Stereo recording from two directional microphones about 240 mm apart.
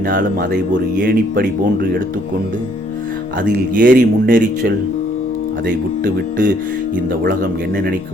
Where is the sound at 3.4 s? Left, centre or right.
Right.